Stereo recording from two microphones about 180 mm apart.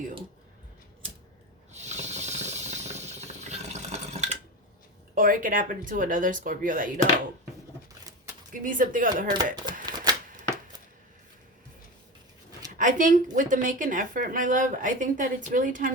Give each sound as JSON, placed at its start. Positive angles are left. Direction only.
{"t": 1.7, "sound": "hiss", "side_deg": -40}
{"t": 5.1, "sound": "speech", "side_deg": -50}
{"t": 8.6, "sound": "speech", "side_deg": -50}
{"t": 9.8, "sound": "a sound", "side_deg": -20}
{"t": 12.5, "sound": "a sound", "side_deg": -20}
{"t": 12.7, "sound": "speech", "side_deg": -45}